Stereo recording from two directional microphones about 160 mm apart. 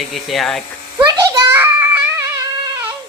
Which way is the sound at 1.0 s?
25° right (ahead or behind).